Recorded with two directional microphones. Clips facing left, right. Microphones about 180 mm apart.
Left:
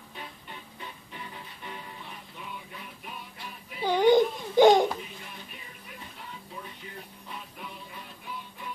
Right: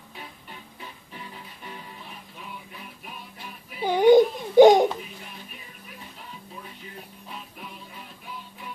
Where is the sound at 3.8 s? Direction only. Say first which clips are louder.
Right 2 dB; 15° right (ahead or behind).